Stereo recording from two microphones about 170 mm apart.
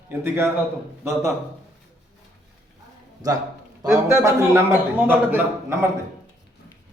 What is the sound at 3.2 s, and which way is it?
A man's voice, 20° right (ahead or behind).